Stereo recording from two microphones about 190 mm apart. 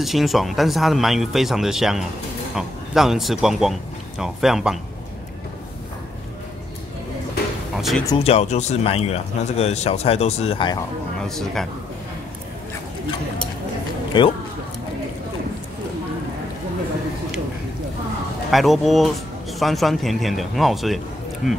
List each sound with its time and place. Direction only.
0.0 s speech: centre (ahead or behind)
7.7 s music: centre (ahead or behind)
8.2 s speech: 35° left (ahead or behind)
11.1 s speech: centre (ahead or behind)
14.1 s speech: 25° left (ahead or behind)
18.5 s speech: centre (ahead or behind)